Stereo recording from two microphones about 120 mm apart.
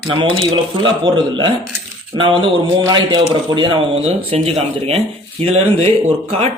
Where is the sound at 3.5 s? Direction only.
50° right (ahead or behind).